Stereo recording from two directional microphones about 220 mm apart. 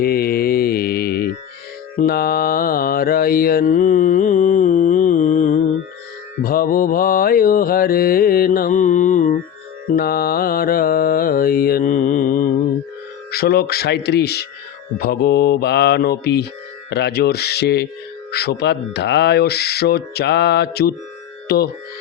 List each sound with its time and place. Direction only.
0.0 s mantra: 40° left (ahead or behind)
13.3 s speech: 45° left (ahead or behind)